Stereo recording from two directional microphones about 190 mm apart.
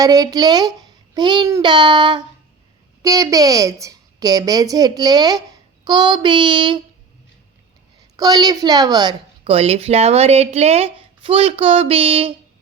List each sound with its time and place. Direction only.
0.0 s a woman's voice: 20° right (ahead or behind)
8.1 s a woman's voice: 20° right (ahead or behind)